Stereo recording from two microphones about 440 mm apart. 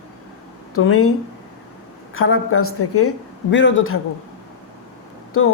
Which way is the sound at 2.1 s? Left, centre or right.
Left.